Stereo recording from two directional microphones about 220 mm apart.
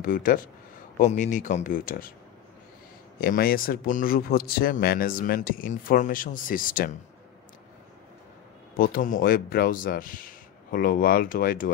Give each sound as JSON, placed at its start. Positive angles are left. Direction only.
{"t": 0.0, "sound": "a man's voice", "side_deg": 40}
{"t": 3.2, "sound": "a man's voice", "side_deg": 40}
{"t": 8.7, "sound": "a man's voice", "side_deg": 40}